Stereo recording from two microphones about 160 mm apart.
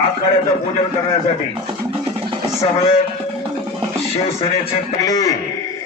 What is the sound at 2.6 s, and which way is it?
Speech, 40° left (ahead or behind).